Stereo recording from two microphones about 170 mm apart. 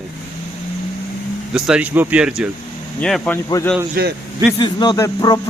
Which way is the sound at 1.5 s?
5° right (ahead or behind).